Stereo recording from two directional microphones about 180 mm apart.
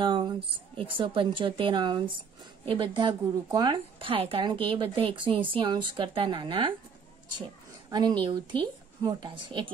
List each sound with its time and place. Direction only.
0.0 s a woman's voice: 30° right (ahead or behind)
8.2 s a woman's voice: 25° right (ahead or behind)